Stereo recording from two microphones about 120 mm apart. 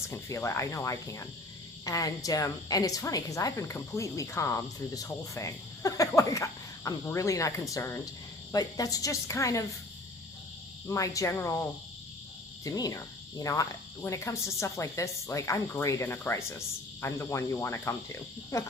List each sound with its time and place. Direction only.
0.1 s a woman's voice: 25° left (ahead or behind)
10.8 s a woman's voice: 25° left (ahead or behind)
12.6 s a woman's voice: 30° left (ahead or behind)